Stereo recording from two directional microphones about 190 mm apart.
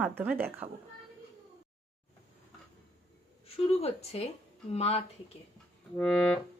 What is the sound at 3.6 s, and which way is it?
Speech, 35° left (ahead or behind).